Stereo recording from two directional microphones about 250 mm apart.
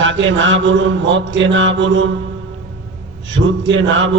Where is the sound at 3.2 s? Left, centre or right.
Right.